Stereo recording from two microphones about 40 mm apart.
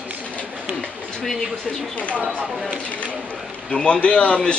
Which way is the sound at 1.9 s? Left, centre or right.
Left.